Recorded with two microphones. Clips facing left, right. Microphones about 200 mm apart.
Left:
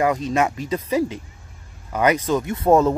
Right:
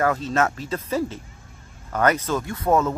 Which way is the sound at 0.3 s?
15° left (ahead or behind).